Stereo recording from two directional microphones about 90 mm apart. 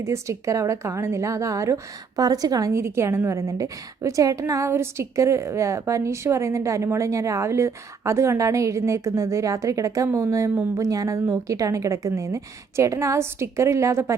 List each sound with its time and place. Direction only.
0.0 s a woman's voice: 35° right (ahead or behind)